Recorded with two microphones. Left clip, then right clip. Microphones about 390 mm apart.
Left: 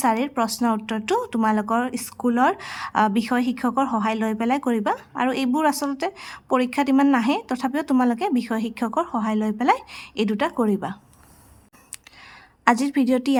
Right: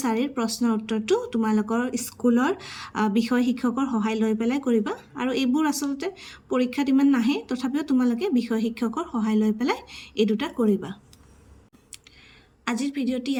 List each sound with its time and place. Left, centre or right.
0.0 s speech: centre
12.6 s speech: centre